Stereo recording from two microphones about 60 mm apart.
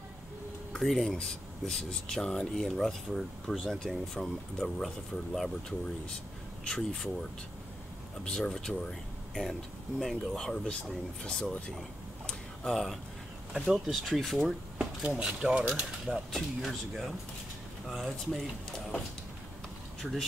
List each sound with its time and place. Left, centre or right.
0.7 s speech: centre
12.3 s a sound: centre
13.7 s speech: centre
15.0 s speech: centre
16.1 s speech: centre
20.0 s speech: centre